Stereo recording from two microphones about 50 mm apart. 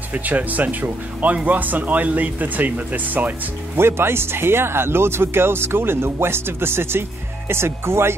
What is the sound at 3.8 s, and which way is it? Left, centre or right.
Speech, right.